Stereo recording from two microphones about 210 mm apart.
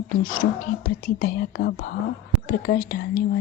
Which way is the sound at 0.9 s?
40° left (ahead or behind).